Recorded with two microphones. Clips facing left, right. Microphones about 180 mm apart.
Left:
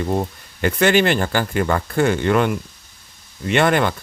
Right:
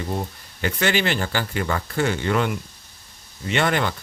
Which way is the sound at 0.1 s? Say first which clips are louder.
Left 6 dB; 55° left (ahead or behind).